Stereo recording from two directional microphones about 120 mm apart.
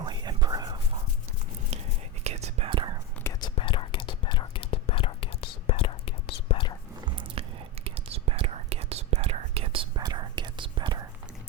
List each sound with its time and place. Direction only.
0.0 s whispering: 35° right (ahead or behind)
1.7 s whispering: 65° right (ahead or behind)
3.4 s whispering: 45° left (ahead or behind)
7.0 s biting: 40° right (ahead or behind)
7.8 s whispering: 55° right (ahead or behind)
10.0 s whispering: 35° right (ahead or behind)